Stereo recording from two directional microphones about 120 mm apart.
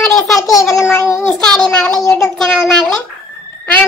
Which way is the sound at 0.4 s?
30° left (ahead or behind).